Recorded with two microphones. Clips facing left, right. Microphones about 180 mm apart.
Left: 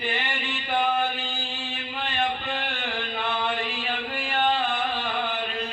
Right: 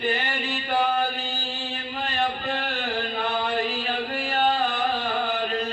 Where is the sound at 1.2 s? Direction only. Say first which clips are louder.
Right 2 dB; 40° right (ahead or behind).